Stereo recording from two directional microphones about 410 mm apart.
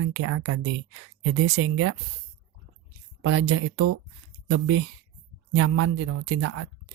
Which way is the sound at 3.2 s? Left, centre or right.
Right.